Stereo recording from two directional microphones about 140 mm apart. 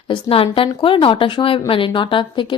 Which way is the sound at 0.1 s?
40° left (ahead or behind).